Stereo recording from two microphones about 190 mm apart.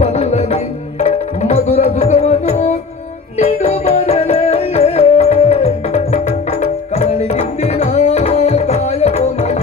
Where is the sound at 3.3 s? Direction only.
35° left (ahead or behind).